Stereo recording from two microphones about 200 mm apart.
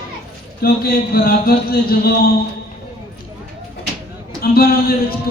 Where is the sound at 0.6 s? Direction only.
50° left (ahead or behind).